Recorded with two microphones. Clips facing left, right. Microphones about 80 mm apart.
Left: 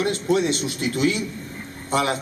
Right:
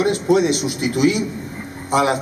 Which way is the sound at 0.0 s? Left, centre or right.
Centre.